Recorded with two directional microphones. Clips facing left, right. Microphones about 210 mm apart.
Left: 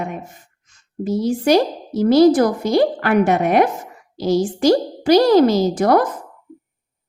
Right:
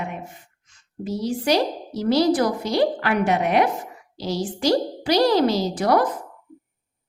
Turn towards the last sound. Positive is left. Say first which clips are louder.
# left 5 dB
turn(degrees=50)  # may be behind; listen again after turning